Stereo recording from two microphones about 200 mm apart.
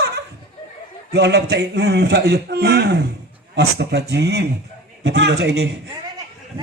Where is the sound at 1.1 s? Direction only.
55° right (ahead or behind).